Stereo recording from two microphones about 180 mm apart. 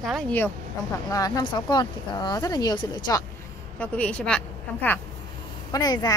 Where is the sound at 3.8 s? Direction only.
5° left (ahead or behind).